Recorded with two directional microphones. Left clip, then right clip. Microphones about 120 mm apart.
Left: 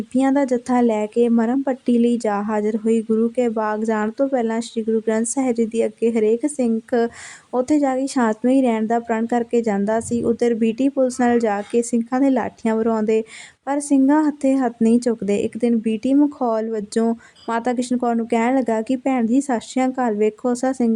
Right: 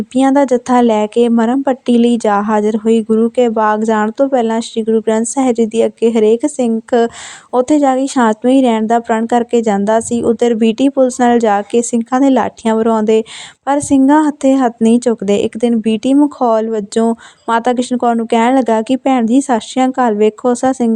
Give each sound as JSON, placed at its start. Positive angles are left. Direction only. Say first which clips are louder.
{"t": 0.1, "sound": "speech", "louder": "right 8 dB", "side_deg": -35}